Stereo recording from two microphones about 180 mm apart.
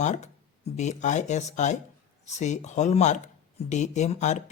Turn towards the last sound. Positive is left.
turn(degrees=40)  # may be behind; listen again after turning